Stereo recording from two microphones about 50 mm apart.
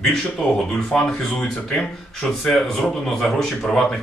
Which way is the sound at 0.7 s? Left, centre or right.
Centre.